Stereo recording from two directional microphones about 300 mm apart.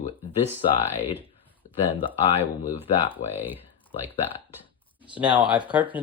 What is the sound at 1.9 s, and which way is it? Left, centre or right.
Speech, centre.